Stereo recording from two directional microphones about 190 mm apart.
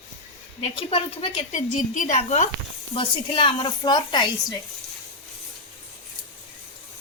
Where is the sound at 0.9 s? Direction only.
30° left (ahead or behind).